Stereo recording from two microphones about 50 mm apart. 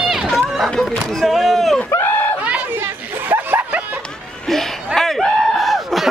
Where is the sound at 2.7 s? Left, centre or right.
Right.